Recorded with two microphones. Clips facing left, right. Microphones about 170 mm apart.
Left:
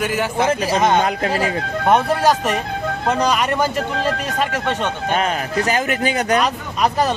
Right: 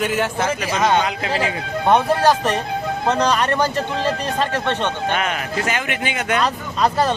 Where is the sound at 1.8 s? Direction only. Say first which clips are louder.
Even; 10° left (ahead or behind).